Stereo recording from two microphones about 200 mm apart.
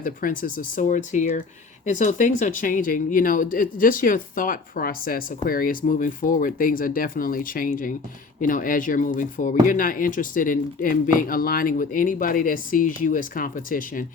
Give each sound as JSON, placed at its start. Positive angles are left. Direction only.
{"t": 0.0, "sound": "speech", "side_deg": 45}